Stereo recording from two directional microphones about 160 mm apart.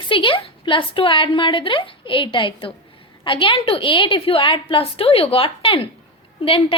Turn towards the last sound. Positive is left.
turn(degrees=35)  # may be behind; listen again after turning